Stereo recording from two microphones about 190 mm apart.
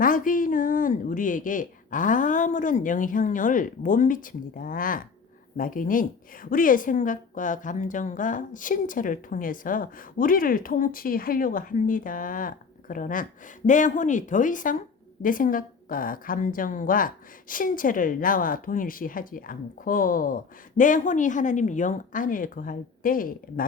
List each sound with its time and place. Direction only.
0.0 s a woman's voice: 45° left (ahead or behind)